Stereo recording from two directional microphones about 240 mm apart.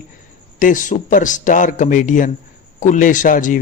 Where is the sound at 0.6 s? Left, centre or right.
Left.